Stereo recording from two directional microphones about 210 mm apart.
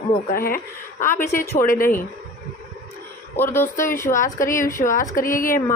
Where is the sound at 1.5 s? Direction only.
40° left (ahead or behind).